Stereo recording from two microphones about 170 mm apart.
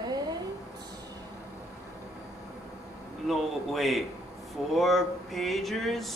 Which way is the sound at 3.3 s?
Centre (ahead or behind).